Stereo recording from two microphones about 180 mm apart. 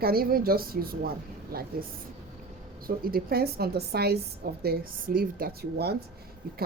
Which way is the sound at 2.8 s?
55° right (ahead or behind).